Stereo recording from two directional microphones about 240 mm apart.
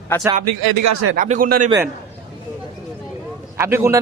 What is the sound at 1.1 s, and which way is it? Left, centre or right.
Speech, right.